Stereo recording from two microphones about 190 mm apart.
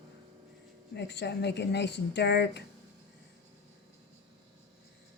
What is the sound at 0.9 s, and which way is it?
A woman's voice, 65° left (ahead or behind).